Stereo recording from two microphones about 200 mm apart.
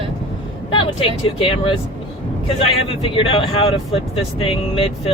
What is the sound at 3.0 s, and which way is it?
Speech, 30° left (ahead or behind).